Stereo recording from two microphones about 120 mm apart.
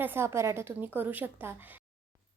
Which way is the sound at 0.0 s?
20° right (ahead or behind).